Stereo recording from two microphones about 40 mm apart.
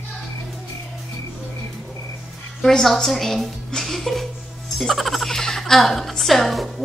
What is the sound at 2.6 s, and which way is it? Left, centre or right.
A woman's voice, centre.